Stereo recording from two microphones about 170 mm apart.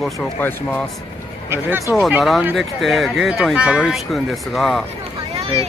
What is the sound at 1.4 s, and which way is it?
Speech, 15° right (ahead or behind).